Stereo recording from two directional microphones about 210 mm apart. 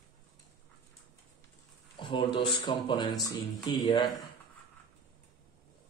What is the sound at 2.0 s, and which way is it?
Speech, 25° left (ahead or behind).